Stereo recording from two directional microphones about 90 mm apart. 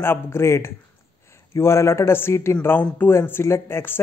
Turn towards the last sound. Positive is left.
turn(degrees=25)  # may be behind; listen again after turning